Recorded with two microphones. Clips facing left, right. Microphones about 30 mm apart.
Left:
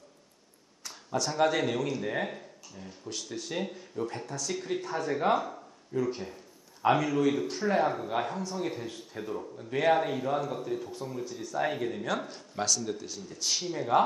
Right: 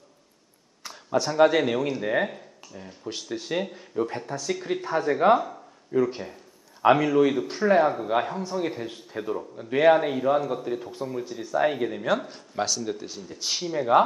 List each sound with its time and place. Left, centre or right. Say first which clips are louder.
0.8 s speech: right 6 dB; right
2.2 s a sound: right 5 dB; centre
3.1 s speech: right 6 dB; right